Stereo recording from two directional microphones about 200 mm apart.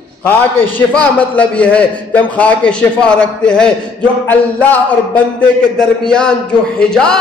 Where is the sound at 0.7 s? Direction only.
5° left (ahead or behind).